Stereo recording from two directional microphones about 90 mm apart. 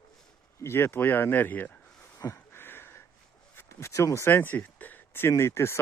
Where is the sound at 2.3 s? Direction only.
25° left (ahead or behind).